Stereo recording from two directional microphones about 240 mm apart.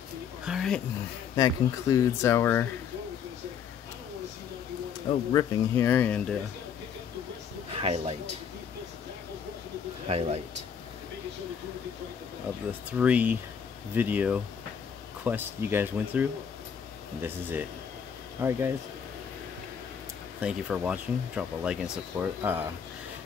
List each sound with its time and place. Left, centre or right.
0.5 s speech: centre
1.3 s speech: centre
5.3 s speech: centre
7.7 s speech: right
10.0 s speech: right
12.9 s speech: centre
20.3 s speech: centre